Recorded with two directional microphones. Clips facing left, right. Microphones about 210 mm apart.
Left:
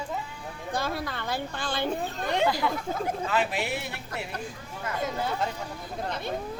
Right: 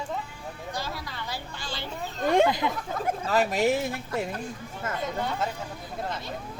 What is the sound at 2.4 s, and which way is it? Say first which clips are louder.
Speech: even; 20° right (ahead or behind).